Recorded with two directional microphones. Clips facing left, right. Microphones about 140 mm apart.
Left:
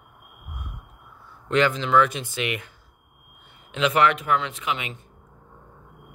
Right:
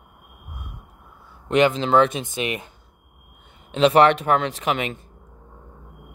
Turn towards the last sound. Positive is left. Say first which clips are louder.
# right 6 dB
turn(degrees=-40)  # may be behind; listen again after turning